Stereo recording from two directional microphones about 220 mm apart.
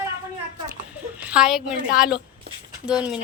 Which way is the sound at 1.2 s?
5° right (ahead or behind).